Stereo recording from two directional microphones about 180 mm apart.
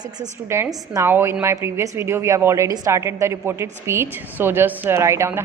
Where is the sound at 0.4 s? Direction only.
15° right (ahead or behind).